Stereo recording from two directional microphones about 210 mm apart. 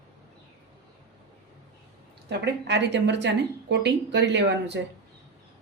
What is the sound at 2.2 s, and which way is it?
A woman's voice, 55° right (ahead or behind).